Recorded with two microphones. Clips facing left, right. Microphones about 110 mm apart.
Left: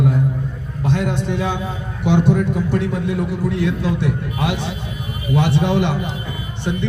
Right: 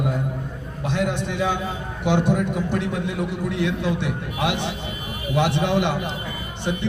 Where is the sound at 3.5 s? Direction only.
60° right (ahead or behind).